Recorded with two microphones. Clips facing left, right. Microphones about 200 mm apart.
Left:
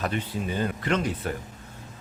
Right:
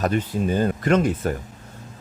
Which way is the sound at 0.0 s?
45° right (ahead or behind).